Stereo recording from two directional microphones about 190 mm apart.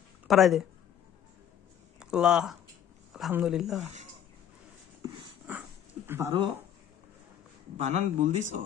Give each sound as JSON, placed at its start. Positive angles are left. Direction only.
{"t": 0.3, "sound": "speech", "side_deg": 0}
{"t": 2.0, "sound": "speech", "side_deg": -5}
{"t": 6.0, "sound": "speech", "side_deg": -15}
{"t": 7.7, "sound": "speech", "side_deg": -35}